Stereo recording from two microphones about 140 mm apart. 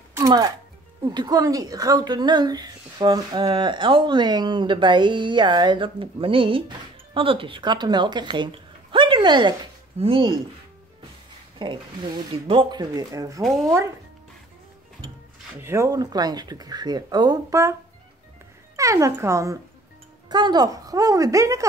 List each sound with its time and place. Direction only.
0.1 s music: 25° right (ahead or behind)
1.0 s speech: 30° right (ahead or behind)
11.5 s speech: 35° right (ahead or behind)
13.4 s speech: centre (ahead or behind)
15.6 s speech: 20° right (ahead or behind)
18.8 s speech: 25° right (ahead or behind)
20.2 s speech: 30° right (ahead or behind)